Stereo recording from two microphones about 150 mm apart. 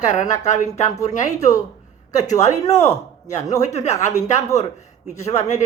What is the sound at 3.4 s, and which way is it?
Speech, 20° left (ahead or behind).